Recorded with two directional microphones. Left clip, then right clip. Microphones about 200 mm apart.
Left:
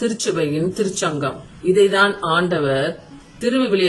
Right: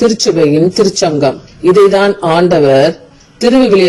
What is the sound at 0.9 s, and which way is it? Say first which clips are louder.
Speech: right 11 dB; 30° right (ahead or behind).